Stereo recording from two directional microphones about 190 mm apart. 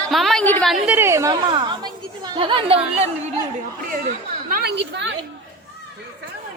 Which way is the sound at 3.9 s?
45° right (ahead or behind).